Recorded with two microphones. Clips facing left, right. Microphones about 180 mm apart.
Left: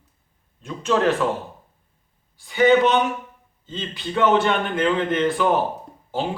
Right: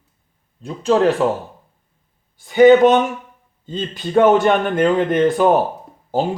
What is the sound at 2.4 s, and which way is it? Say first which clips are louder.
A man's voice: right 7 dB; 50° right (ahead or behind).